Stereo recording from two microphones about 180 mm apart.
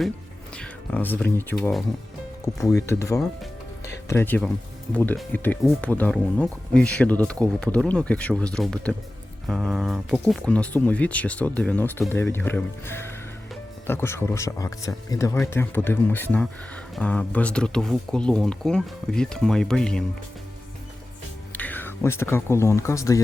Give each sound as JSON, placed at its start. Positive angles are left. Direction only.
{"t": 0.5, "sound": "speech", "side_deg": 5}
{"t": 21.5, "sound": "speech", "side_deg": 10}